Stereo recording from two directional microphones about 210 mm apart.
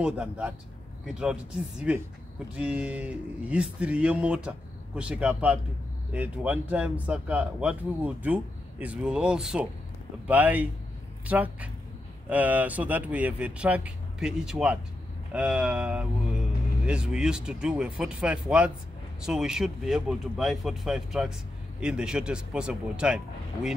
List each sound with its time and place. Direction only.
0.0 s speech: 5° right (ahead or behind)